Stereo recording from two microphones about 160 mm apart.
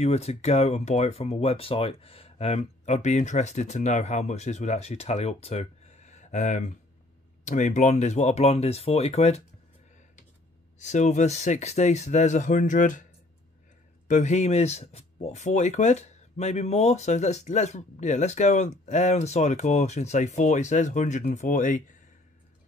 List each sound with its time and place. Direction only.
0.0 s speech: 40° left (ahead or behind)
10.8 s speech: 45° left (ahead or behind)
14.0 s speech: 50° left (ahead or behind)